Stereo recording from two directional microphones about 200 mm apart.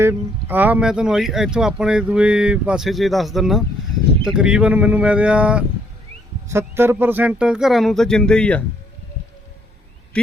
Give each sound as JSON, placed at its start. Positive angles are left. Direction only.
{"t": 0.0, "sound": "speech", "side_deg": -10}